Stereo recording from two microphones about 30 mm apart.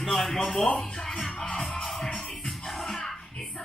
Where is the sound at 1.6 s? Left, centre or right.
Left.